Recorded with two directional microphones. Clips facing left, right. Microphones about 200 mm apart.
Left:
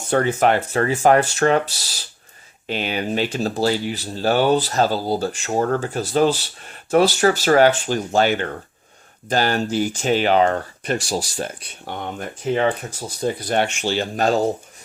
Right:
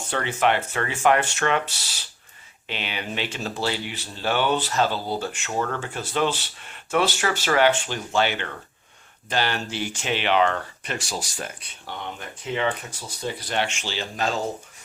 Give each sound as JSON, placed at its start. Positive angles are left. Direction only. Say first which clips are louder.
{"t": 0.1, "sound": "speech", "louder": "left 6 dB", "side_deg": 40}
{"t": 11.9, "sound": "speech", "louder": "left 6 dB", "side_deg": 45}